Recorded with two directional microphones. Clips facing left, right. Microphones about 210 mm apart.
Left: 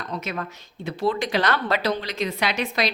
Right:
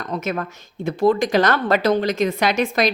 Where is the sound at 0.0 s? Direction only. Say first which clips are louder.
Right 5 dB; 50° right (ahead or behind).